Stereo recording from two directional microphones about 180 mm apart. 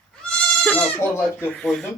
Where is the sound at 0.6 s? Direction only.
10° left (ahead or behind).